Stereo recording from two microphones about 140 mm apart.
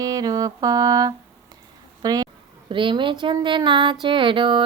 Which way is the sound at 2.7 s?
35° right (ahead or behind).